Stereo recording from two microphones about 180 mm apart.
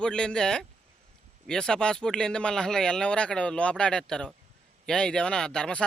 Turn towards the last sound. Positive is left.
turn(degrees=5)  # may be behind; listen again after turning